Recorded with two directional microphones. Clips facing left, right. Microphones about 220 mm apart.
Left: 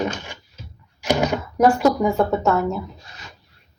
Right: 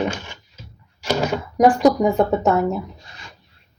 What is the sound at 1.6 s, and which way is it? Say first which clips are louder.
Speech: right 2 dB; 15° right (ahead or behind).